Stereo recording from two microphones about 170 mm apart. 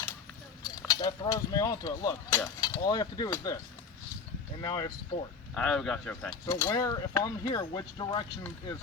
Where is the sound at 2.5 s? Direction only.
25° left (ahead or behind).